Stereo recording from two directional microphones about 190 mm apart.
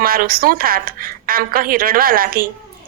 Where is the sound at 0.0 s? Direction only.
50° right (ahead or behind).